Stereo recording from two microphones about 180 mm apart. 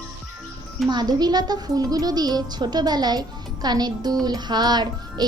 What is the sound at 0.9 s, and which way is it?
Speech, 20° right (ahead or behind).